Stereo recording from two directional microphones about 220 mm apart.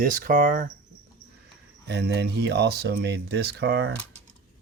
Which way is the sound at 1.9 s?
50° right (ahead or behind).